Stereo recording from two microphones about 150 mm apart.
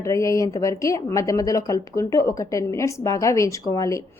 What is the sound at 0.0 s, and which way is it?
A woman's voice, 20° left (ahead or behind).